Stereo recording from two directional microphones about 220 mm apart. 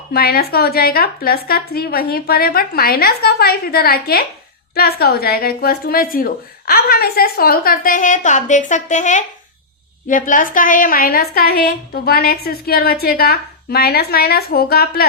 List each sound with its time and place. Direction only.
0.1 s a woman's voice: 45° left (ahead or behind)